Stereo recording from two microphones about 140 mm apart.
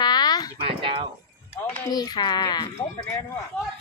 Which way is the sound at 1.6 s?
15° left (ahead or behind).